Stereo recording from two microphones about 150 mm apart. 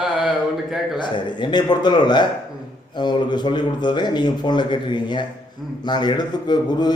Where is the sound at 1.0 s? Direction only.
30° left (ahead or behind).